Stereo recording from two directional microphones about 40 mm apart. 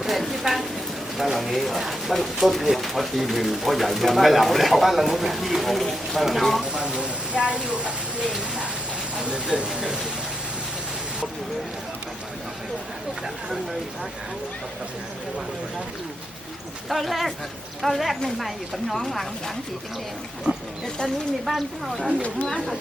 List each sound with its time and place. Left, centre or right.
0.0 s a woman's voice: centre
7.0 s speech: right
8.2 s speech: centre
16.9 s speech: centre
21.4 s speech: centre